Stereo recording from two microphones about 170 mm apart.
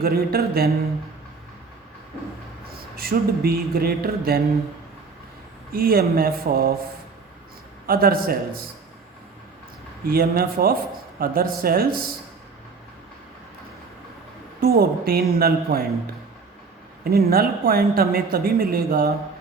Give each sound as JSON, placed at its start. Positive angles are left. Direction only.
{"t": 0.0, "sound": "a woman's voice", "side_deg": -65}
{"t": 2.6, "sound": "mantra", "side_deg": -65}
{"t": 5.7, "sound": "a woman's voice", "side_deg": -60}
{"t": 7.9, "sound": "a woman's voice", "side_deg": -60}
{"t": 10.1, "sound": "a woman's voice", "side_deg": -60}
{"t": 14.6, "sound": "a woman's voice", "side_deg": -65}
{"t": 17.0, "sound": "a woman's voice", "side_deg": -65}